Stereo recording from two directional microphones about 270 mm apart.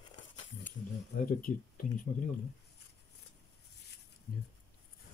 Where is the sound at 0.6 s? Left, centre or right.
Left.